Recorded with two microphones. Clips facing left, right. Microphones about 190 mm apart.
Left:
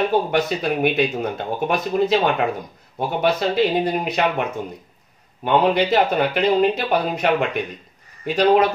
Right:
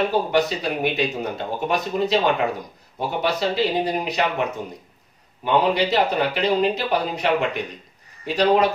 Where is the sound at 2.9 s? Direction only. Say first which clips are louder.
Left 3 dB; 55° left (ahead or behind).